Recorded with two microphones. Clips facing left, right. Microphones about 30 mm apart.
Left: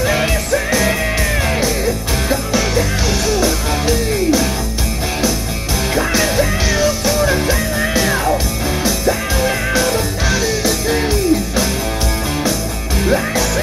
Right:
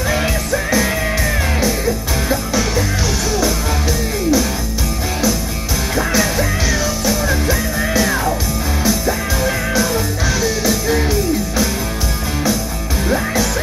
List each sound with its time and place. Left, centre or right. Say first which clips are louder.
0.0 s music: left 2 dB; centre
5.9 s music: left 1 dB; centre
13.1 s music: left 1 dB; centre